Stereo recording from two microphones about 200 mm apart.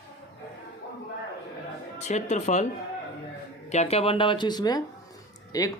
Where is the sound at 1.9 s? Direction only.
35° left (ahead or behind).